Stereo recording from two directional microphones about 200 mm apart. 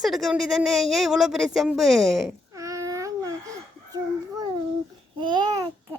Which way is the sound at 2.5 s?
15° right (ahead or behind).